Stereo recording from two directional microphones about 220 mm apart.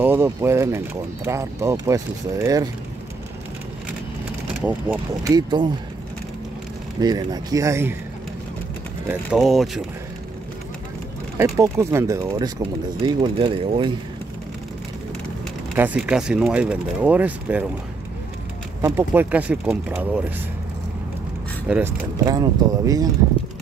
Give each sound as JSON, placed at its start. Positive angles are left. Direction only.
{"t": 0.0, "sound": "speech", "side_deg": -10}
{"t": 4.6, "sound": "speech", "side_deg": -5}
{"t": 7.0, "sound": "speech", "side_deg": -20}
{"t": 9.0, "sound": "speech", "side_deg": -10}
{"t": 11.3, "sound": "speech", "side_deg": -15}
{"t": 15.7, "sound": "speech", "side_deg": -5}
{"t": 18.8, "sound": "speech", "side_deg": -10}
{"t": 21.6, "sound": "speech", "side_deg": -5}
{"t": 22.2, "sound": "speech", "side_deg": -15}